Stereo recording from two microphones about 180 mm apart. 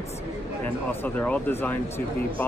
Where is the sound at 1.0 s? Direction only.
10° left (ahead or behind).